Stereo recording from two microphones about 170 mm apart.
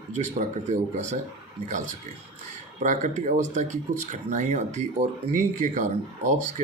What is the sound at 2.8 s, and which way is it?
Speech, 50° right (ahead or behind).